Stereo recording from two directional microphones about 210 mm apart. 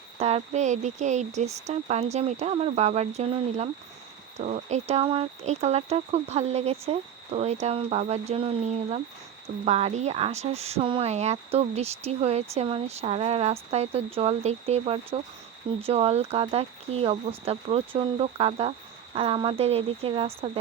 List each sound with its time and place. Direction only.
0.2 s speech: 30° right (ahead or behind)